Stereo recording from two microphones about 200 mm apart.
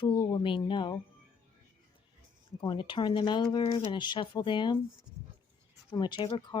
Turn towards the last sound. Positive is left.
turn(degrees=25)  # may be behind; listen again after turning